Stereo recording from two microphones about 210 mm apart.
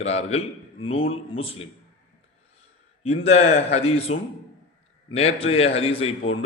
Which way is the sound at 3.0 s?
30° left (ahead or behind).